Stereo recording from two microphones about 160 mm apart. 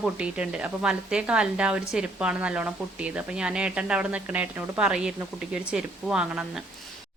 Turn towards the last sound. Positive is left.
turn(degrees=-5)  # may be behind; listen again after turning